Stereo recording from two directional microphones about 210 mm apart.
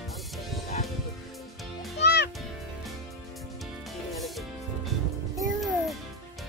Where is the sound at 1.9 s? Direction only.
55° left (ahead or behind).